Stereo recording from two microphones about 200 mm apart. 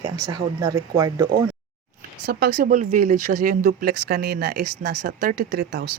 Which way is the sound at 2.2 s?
50° right (ahead or behind).